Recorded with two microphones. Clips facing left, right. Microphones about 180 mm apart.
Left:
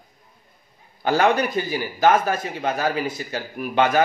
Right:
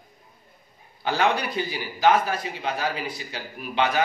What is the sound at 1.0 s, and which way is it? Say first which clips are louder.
A man's voice: left 5 dB; 45° left (ahead or behind).